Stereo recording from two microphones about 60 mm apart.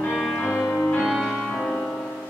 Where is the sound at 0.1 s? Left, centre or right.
Centre.